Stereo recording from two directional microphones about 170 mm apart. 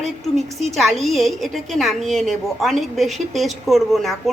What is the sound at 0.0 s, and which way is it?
A woman's voice, centre (ahead or behind).